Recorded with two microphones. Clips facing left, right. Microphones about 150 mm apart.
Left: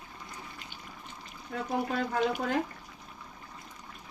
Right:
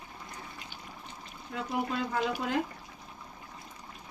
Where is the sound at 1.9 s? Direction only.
55° left (ahead or behind).